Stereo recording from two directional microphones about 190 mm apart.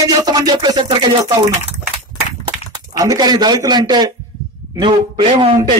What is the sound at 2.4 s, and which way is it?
Speech, 20° right (ahead or behind).